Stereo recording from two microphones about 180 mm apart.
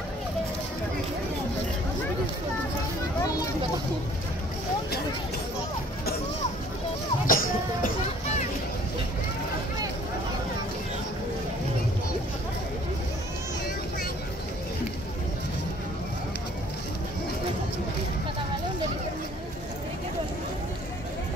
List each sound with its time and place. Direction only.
7.2 s music: 50° left (ahead or behind)